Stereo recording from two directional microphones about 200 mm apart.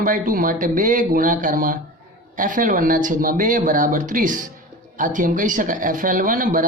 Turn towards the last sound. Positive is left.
turn(degrees=-45)  # may be behind; listen again after turning